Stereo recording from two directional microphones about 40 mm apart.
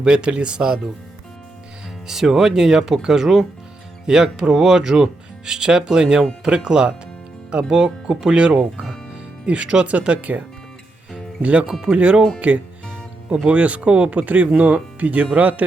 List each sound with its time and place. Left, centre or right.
0.0 s speech: right
2.0 s speech: centre; by 10.4 s right
11.4 s speech: right
11.7 s speech: right